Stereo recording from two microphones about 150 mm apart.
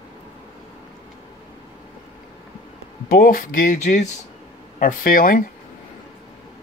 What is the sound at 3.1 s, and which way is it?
Speech, 70° left (ahead or behind).